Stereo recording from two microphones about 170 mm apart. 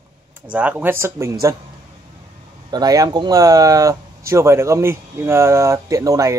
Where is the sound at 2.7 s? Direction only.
25° right (ahead or behind).